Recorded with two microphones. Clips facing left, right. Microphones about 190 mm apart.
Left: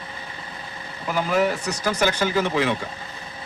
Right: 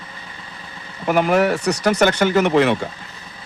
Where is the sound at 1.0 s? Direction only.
65° right (ahead or behind).